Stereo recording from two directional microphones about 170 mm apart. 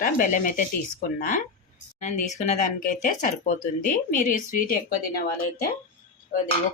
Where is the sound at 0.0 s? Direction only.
50° left (ahead or behind).